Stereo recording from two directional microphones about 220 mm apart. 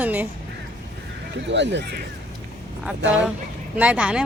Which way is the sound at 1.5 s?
50° right (ahead or behind).